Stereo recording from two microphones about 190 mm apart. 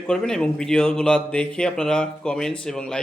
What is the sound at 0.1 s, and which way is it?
A man's voice, 5° left (ahead or behind).